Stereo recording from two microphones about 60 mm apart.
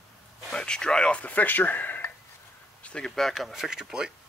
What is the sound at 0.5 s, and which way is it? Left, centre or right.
Speech, centre.